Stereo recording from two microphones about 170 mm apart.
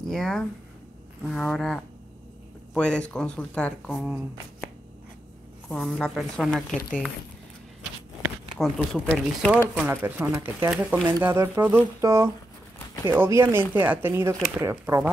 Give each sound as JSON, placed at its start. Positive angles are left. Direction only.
{"t": 0.1, "sound": "speech", "side_deg": 5}
{"t": 3.9, "sound": "speech", "side_deg": -5}
{"t": 5.7, "sound": "speech", "side_deg": 5}
{"t": 8.5, "sound": "speech", "side_deg": 0}
{"t": 9.8, "sound": "speech", "side_deg": -10}